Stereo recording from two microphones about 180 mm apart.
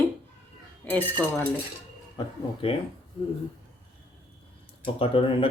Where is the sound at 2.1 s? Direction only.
30° left (ahead or behind).